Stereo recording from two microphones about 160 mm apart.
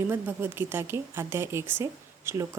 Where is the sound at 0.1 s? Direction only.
15° right (ahead or behind).